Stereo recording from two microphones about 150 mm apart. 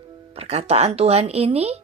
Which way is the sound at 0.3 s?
45° right (ahead or behind).